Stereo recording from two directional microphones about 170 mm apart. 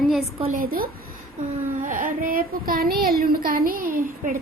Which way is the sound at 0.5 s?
60° right (ahead or behind).